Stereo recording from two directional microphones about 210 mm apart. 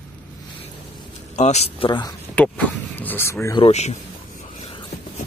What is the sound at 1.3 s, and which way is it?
Speech, 30° left (ahead or behind).